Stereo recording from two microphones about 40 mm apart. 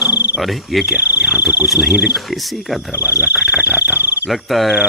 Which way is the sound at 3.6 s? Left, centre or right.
Right.